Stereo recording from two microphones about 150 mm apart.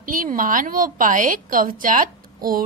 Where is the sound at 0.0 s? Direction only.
65° right (ahead or behind).